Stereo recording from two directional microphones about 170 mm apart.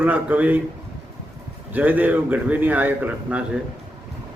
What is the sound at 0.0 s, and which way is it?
Speech, 10° right (ahead or behind).